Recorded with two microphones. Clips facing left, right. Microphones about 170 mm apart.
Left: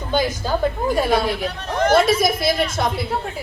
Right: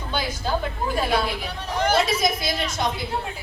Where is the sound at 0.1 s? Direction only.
45° left (ahead or behind).